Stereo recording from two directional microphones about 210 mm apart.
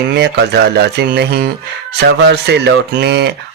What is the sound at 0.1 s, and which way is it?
Speech, 50° right (ahead or behind).